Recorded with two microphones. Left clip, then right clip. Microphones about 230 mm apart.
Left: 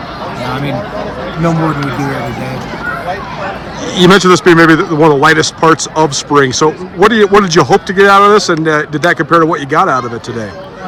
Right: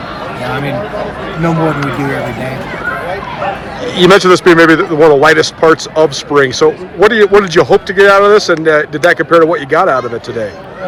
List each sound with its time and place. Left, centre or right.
3.9 s a man's voice: centre